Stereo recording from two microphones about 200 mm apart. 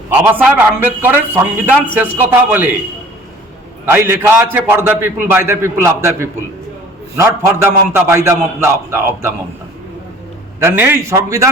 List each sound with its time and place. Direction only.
0.1 s a man's voice: 5° right (ahead or behind)
3.8 s a man's voice: 10° right (ahead or behind)
10.6 s a man's voice: 10° right (ahead or behind)